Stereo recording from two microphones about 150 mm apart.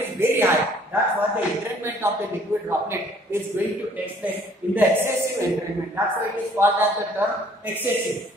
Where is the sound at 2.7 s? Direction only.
15° right (ahead or behind).